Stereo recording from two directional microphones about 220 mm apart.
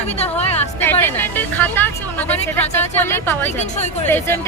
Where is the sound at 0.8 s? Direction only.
10° left (ahead or behind).